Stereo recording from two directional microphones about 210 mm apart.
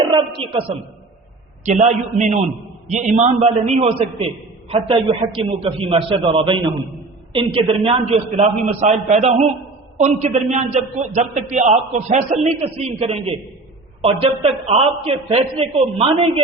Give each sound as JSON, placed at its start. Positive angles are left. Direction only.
{"t": 0.1, "sound": "a man's voice", "side_deg": -25}
{"t": 2.9, "sound": "a man's voice", "side_deg": -35}